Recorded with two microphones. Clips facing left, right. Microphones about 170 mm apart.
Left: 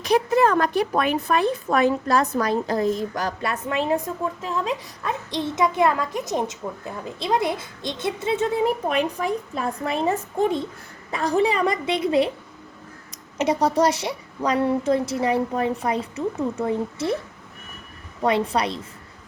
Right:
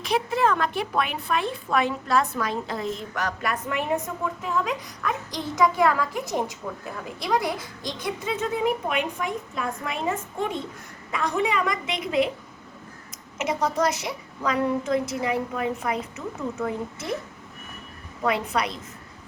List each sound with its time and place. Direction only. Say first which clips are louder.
0.0 s a woman's voice: left 5 dB; 40° left (ahead or behind)
13.4 s speech: left 5 dB; 35° left (ahead or behind)
18.2 s a woman's voice: left 4 dB; 30° left (ahead or behind)